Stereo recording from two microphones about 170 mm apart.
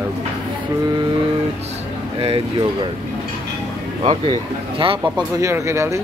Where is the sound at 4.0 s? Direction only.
30° right (ahead or behind).